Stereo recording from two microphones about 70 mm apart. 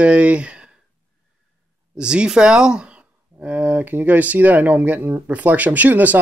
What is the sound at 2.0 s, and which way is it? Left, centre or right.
Speech, centre.